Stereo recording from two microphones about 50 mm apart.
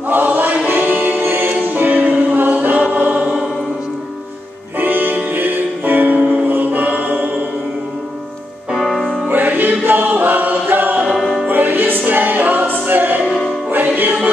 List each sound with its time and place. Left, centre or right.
0.1 s choir: right
0.7 s music: right
1.2 s music: right
1.6 s choir: right
4.7 s music: right
8.7 s music: centre
9.3 s choir: right
11.1 s music: centre
11.4 s music: right